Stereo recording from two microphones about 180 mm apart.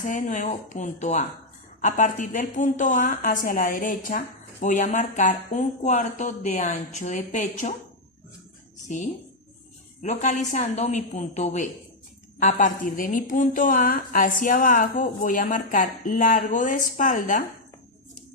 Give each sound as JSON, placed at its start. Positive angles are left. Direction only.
{"t": 0.0, "sound": "a woman's voice", "side_deg": 45}
{"t": 10.0, "sound": "a woman's voice", "side_deg": 40}